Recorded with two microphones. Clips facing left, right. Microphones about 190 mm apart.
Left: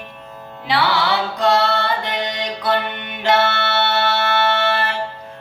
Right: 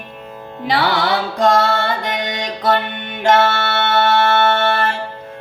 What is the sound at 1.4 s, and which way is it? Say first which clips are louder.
Music: right 3 dB; 50° right (ahead or behind).